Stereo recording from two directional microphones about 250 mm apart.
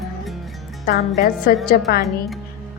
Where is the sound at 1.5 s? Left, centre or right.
Left.